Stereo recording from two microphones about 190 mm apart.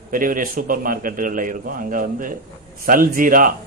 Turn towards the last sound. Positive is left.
turn(degrees=-45)  # may be behind; listen again after turning